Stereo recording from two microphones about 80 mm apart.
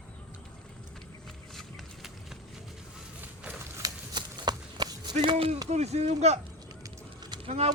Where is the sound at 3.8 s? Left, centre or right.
Right.